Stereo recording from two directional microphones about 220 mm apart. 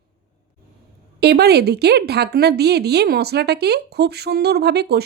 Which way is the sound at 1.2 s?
45° right (ahead or behind).